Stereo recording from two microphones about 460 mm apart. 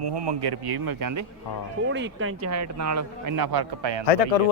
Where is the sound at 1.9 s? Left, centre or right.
Right.